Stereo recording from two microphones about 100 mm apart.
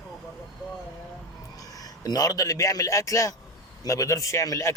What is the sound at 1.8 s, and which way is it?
Speech, 40° left (ahead or behind).